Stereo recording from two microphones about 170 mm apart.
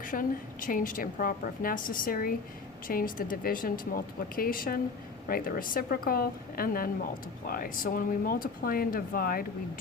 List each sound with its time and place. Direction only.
0.0 s a woman's voice: 55° left (ahead or behind)